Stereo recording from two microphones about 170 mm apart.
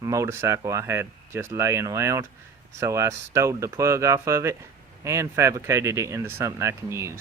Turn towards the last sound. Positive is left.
turn(degrees=-15)  # may be behind; listen again after turning